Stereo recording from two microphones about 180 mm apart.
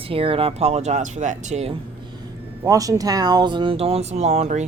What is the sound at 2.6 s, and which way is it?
Speech, 20° right (ahead or behind).